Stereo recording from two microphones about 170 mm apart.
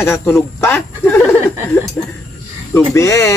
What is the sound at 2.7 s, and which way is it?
Speech, 15° left (ahead or behind).